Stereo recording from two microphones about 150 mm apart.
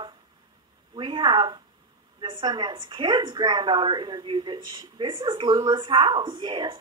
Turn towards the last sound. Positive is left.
turn(degrees=-30)  # may be behind; listen again after turning